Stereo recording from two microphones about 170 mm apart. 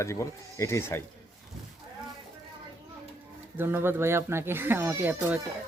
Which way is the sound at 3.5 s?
15° right (ahead or behind).